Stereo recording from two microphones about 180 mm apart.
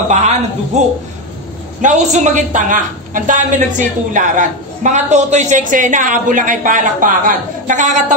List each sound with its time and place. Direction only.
0.1 s a woman's voice: 40° right (ahead or behind)